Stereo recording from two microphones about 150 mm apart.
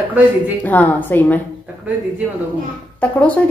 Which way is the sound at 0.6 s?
10° left (ahead or behind).